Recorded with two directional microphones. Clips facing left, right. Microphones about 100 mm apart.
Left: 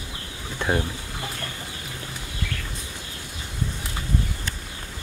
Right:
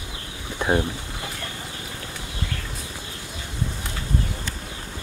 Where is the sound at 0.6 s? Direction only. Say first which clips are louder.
Right 3 dB; 15° right (ahead or behind).